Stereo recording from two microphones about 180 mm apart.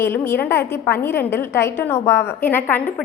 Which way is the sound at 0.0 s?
15° left (ahead or behind).